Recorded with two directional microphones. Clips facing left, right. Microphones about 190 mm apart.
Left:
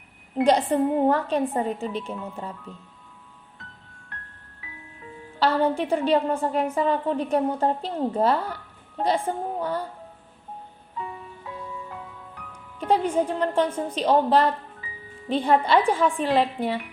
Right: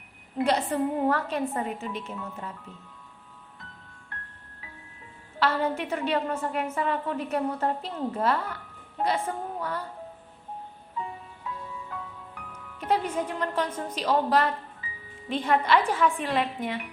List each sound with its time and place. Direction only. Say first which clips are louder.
0.3 s a woman's voice: left 5 dB; 30° left (ahead or behind)
5.4 s a woman's voice: left 4 dB; 35° left (ahead or behind)
12.8 s a woman's voice: left 5 dB; 30° left (ahead or behind)